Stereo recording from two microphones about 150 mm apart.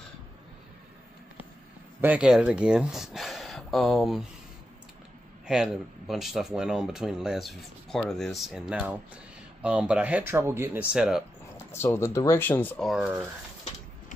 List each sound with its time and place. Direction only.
2.0 s speech: 10° right (ahead or behind)
5.5 s speech: 5° right (ahead or behind)
11.5 s speech: 15° left (ahead or behind)
12.8 s speech: 5° right (ahead or behind)